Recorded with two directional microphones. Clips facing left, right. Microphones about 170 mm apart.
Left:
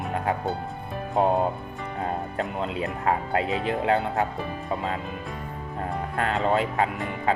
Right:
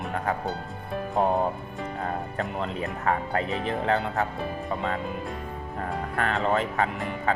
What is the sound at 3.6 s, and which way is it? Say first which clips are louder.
Speech: left 2 dB; 10° left (ahead or behind).